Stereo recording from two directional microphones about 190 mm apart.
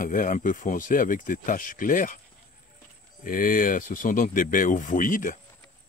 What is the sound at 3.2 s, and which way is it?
Speech, 45° left (ahead or behind).